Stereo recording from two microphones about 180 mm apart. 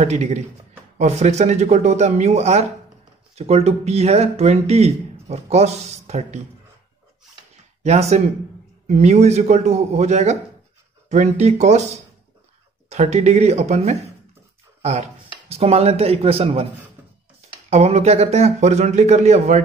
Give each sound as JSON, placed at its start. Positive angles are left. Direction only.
{"t": 0.0, "sound": "speech", "side_deg": -40}
{"t": 7.8, "sound": "speech", "side_deg": -35}
{"t": 12.9, "sound": "speech", "side_deg": -40}
{"t": 17.6, "sound": "speech", "side_deg": -35}